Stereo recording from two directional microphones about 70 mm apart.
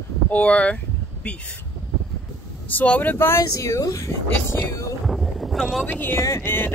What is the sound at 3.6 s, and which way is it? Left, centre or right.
Speech, left.